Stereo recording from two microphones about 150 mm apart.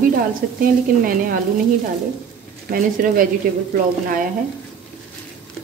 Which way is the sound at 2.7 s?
65° right (ahead or behind).